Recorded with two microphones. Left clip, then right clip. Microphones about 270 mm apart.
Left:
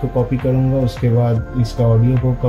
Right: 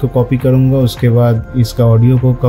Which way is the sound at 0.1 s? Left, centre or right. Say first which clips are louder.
Right 5 dB; right.